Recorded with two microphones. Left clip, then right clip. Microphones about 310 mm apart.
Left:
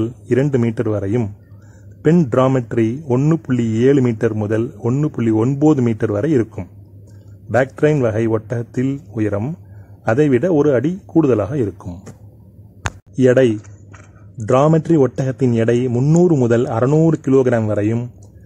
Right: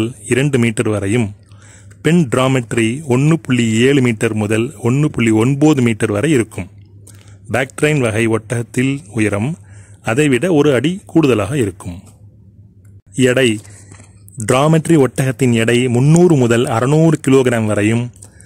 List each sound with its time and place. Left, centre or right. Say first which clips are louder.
0.0 s speech: right 1 dB; right
13.1 s speech: even; right